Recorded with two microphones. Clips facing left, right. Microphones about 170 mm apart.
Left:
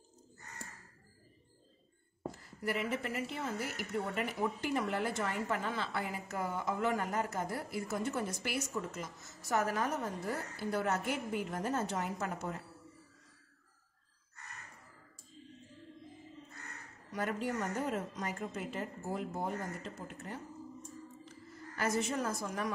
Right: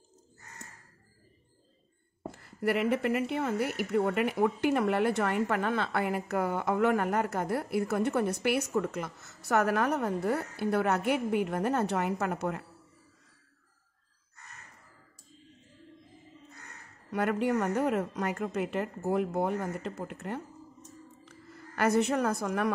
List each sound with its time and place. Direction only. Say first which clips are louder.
2.3 s speech: right 9 dB; 65° right (ahead or behind)
17.1 s a woman's voice: right 8 dB; 65° right (ahead or behind)